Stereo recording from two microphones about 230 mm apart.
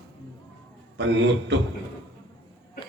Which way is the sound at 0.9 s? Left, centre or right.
Right.